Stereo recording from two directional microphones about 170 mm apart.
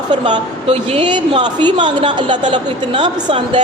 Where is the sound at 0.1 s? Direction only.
30° right (ahead or behind).